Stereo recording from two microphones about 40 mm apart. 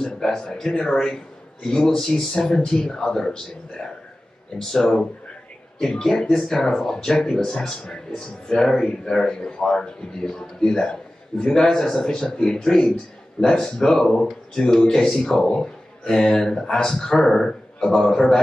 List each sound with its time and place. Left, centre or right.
0.0 s a man's voice: centre